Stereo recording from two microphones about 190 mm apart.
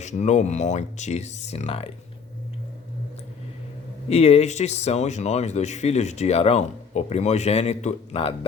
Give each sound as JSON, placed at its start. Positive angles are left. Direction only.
{"t": 0.0, "sound": "speech", "side_deg": 40}
{"t": 4.1, "sound": "speech", "side_deg": 35}